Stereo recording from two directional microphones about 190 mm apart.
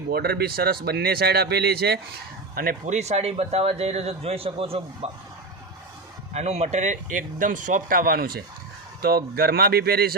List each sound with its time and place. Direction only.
0.1 s speech: 55° right (ahead or behind)
2.6 s speech: 45° right (ahead or behind)
6.3 s speech: 35° right (ahead or behind); by 10.2 s 55° right (ahead or behind)